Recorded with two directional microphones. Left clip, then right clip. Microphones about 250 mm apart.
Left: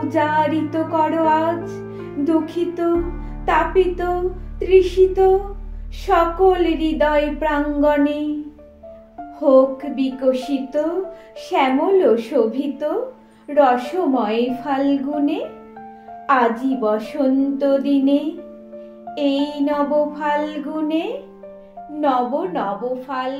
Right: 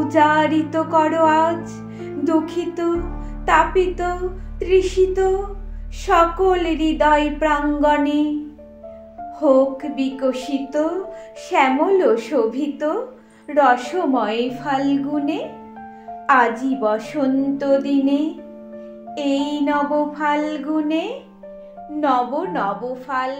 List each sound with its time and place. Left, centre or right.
0.1 s speech: centre
9.4 s speech: right